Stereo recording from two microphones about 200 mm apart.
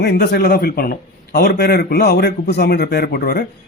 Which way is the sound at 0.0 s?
55° left (ahead or behind).